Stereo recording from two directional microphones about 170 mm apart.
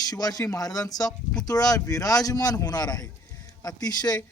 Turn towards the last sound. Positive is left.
turn(degrees=25)  # may be behind; listen again after turning